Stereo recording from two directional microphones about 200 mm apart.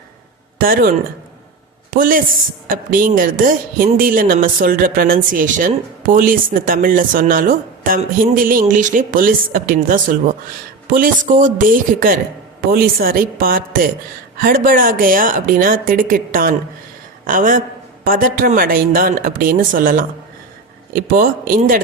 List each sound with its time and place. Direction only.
0.6 s a woman's voice: 45° right (ahead or behind)